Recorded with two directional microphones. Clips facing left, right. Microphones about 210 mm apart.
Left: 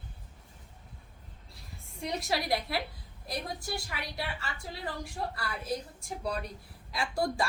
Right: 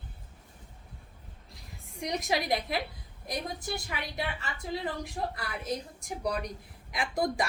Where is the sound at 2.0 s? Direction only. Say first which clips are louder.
Right 2 dB; 15° right (ahead or behind).